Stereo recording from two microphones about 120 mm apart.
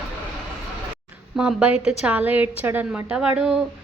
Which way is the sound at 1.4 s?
5° right (ahead or behind).